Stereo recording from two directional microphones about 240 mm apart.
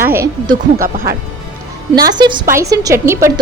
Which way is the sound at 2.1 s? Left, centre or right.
Centre.